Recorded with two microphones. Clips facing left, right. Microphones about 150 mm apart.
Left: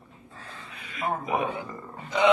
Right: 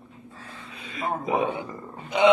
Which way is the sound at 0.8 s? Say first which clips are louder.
Right 1 dB; 30° right (ahead or behind).